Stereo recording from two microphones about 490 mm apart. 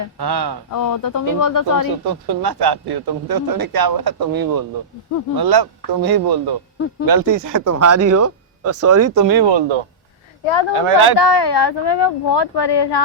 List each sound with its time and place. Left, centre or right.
0.2 s speech: right
0.7 s speech: left
2.0 s speech: right
9.3 s speech: right
10.4 s speech: left
10.7 s speech: right
11.2 s speech: left